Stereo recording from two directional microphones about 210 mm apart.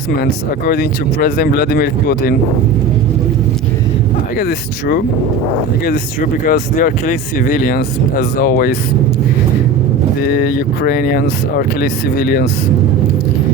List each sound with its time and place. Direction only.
0.2 s speech: 45° left (ahead or behind)
4.4 s speech: 45° left (ahead or behind)
10.2 s speech: 45° left (ahead or behind)